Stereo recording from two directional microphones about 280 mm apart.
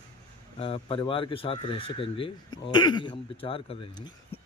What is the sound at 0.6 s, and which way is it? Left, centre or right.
Speech, centre.